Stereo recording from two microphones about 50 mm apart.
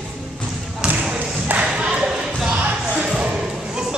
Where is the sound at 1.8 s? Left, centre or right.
Centre.